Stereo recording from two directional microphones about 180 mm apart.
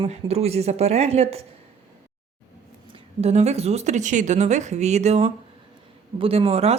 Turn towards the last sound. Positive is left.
turn(degrees=-35)  # may be behind; listen again after turning